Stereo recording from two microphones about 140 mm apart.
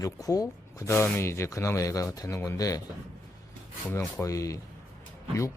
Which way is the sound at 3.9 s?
10° left (ahead or behind).